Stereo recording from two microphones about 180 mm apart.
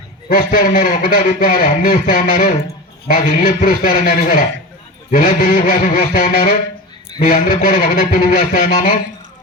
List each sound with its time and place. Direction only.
0.3 s speech: 50° left (ahead or behind)